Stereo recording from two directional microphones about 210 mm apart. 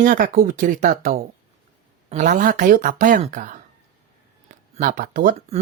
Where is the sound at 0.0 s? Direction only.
40° right (ahead or behind).